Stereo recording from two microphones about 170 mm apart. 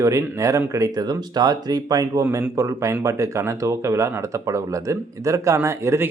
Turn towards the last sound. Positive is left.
turn(degrees=-15)  # may be behind; listen again after turning